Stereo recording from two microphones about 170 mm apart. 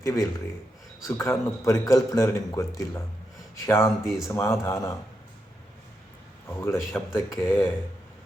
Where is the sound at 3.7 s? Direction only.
15° left (ahead or behind).